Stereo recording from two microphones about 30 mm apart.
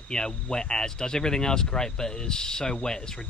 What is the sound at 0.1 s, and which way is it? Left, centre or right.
Speech, left.